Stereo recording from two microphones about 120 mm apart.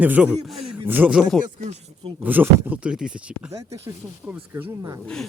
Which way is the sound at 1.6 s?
65° right (ahead or behind).